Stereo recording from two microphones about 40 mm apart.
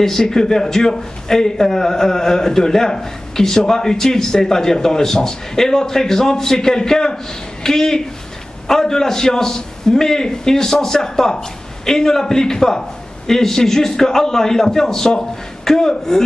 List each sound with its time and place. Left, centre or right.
0.0 s a man's voice: centre